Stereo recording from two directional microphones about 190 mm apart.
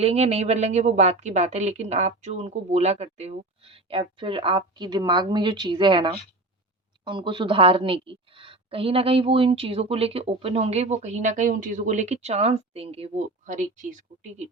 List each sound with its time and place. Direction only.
0.0 s a woman's voice: 35° right (ahead or behind)